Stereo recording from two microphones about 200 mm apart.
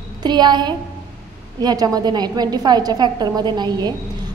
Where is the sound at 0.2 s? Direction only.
20° right (ahead or behind).